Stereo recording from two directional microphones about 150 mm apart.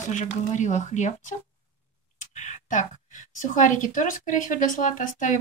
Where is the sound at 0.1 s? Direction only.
55° left (ahead or behind).